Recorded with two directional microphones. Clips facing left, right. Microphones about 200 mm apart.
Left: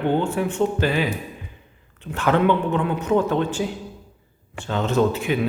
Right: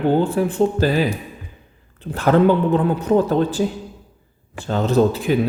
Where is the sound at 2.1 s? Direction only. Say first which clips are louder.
Right 4 dB; 35° right (ahead or behind).